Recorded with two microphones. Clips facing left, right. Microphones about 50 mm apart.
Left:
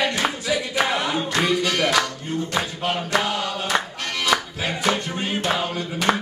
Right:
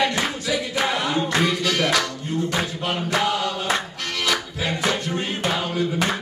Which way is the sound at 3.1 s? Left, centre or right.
Centre.